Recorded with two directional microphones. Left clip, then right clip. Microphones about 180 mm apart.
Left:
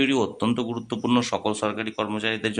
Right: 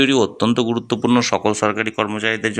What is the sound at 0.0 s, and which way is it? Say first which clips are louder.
Speech: right 7 dB; 30° right (ahead or behind).